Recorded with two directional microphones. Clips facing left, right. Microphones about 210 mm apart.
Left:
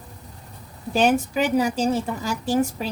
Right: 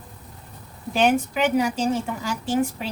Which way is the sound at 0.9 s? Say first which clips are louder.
Left 1 dB; 40° left (ahead or behind).